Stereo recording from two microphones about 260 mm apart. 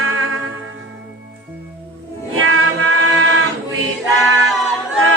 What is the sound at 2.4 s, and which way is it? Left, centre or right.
Music, right.